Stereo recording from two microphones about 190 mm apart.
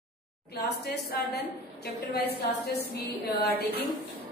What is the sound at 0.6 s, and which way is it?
A woman's voice, 60° left (ahead or behind).